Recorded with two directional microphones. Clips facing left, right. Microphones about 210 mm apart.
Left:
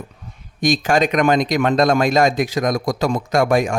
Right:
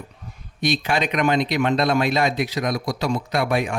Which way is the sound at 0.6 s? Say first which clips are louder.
Left 5 dB; 45° left (ahead or behind).